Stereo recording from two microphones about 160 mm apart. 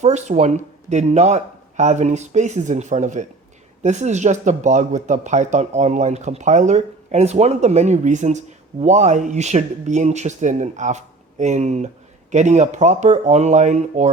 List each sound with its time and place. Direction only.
0.0 s speech: 45° right (ahead or behind)